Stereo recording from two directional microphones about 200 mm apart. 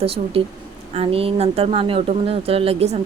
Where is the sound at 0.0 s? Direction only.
30° right (ahead or behind).